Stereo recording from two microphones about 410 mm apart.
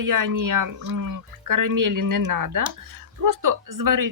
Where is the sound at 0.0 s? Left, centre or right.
Right.